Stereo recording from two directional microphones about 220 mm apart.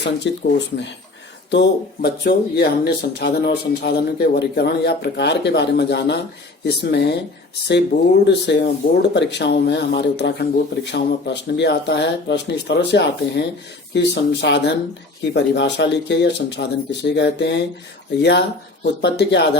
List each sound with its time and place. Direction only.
0.0 s speech: 50° left (ahead or behind)
1.5 s speech: 50° left (ahead or behind)